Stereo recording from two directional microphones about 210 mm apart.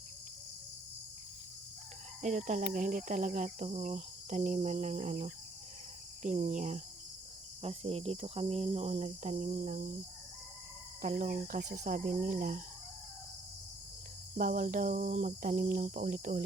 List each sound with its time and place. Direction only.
2.2 s speech: 35° right (ahead or behind)
11.0 s speech: 40° right (ahead or behind)
14.3 s speech: 40° right (ahead or behind)